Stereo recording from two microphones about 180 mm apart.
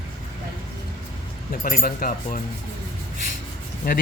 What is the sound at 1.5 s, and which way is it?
Speech, 50° left (ahead or behind).